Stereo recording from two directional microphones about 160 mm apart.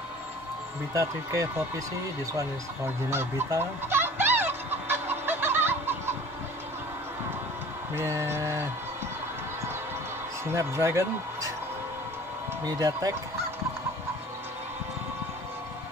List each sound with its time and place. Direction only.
0.9 s speech: 20° right (ahead or behind)
3.1 s fowl: 15° right (ahead or behind)
7.9 s mantra: 15° right (ahead or behind)
10.4 s speech: 15° right (ahead or behind)
12.6 s speech: 20° right (ahead or behind)